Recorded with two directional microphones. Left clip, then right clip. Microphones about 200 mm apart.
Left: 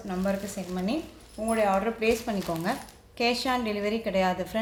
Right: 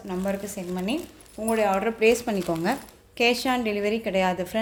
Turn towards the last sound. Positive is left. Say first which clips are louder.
# right 2 dB
turn(degrees=-30)  # may be behind; listen again after turning